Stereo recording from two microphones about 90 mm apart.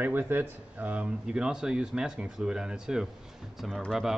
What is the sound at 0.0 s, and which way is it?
Speech, 20° right (ahead or behind).